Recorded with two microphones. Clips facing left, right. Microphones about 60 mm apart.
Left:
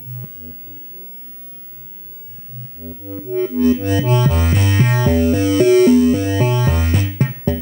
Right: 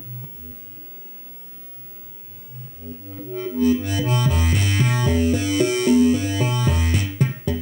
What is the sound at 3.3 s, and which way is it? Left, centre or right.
Music, left.